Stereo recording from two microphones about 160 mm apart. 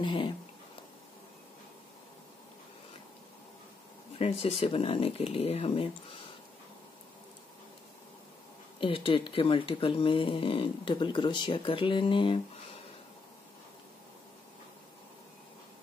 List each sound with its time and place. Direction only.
0.0 s speech: 30° left (ahead or behind)
4.2 s speech: 40° left (ahead or behind)
8.7 s speech: 35° left (ahead or behind)